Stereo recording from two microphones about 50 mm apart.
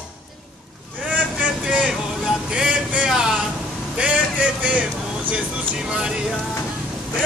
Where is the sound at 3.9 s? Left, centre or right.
Right.